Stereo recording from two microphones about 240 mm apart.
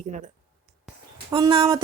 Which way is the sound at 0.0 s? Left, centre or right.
Right.